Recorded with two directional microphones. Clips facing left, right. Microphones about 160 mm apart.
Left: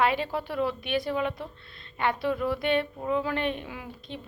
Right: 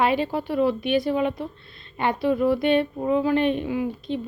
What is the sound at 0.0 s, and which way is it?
A woman's voice, 25° right (ahead or behind).